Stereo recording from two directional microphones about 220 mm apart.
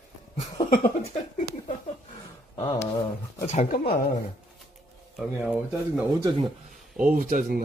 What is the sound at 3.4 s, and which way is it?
Speech, 35° left (ahead or behind).